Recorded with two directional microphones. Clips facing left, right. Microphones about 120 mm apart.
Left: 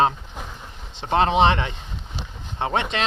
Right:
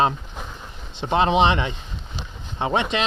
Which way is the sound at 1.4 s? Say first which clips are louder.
Left 1 dB; 40° left (ahead or behind).